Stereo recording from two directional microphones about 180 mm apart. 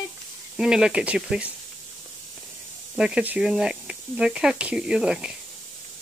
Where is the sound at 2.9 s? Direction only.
5° right (ahead or behind).